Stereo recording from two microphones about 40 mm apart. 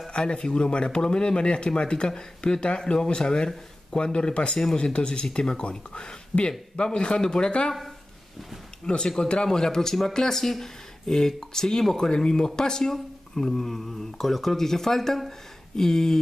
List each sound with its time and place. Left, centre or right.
0.1 s speech: left
8.8 s speech: left